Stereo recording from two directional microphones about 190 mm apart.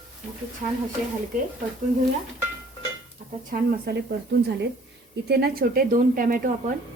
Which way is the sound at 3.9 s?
60° right (ahead or behind).